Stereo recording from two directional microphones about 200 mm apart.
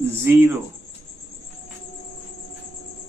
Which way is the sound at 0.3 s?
10° right (ahead or behind).